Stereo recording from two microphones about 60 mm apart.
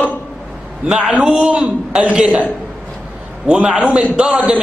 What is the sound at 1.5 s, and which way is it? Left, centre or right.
Speech, right.